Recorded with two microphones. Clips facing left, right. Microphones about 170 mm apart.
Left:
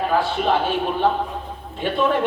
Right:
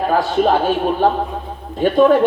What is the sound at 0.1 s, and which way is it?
Speech, 40° right (ahead or behind).